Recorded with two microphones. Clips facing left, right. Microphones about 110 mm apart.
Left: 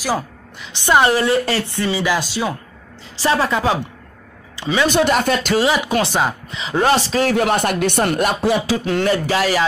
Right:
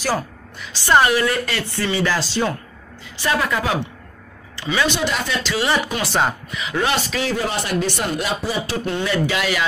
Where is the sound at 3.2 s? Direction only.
30° left (ahead or behind).